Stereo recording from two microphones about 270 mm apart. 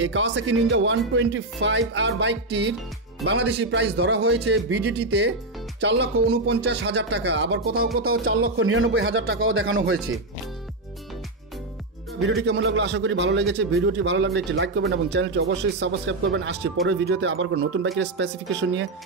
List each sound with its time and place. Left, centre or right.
0.0 s a man's voice: right
8.1 s speech: right
12.4 s a man's voice: right